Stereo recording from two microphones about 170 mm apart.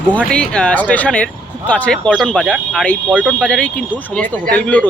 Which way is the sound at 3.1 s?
5° right (ahead or behind).